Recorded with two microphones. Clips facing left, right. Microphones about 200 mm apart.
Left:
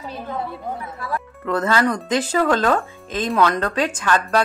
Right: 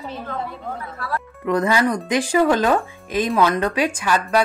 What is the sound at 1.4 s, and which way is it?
A woman's voice, 15° right (ahead or behind).